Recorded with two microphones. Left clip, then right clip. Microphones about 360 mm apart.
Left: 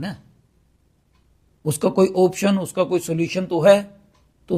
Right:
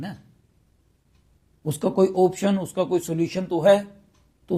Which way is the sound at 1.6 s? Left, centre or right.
Centre.